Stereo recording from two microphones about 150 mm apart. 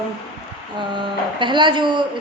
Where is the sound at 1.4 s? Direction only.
30° right (ahead or behind).